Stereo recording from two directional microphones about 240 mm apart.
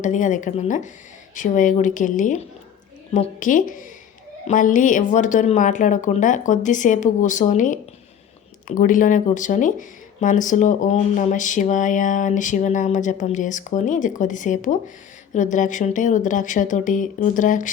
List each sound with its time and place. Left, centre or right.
0.0 s speech: left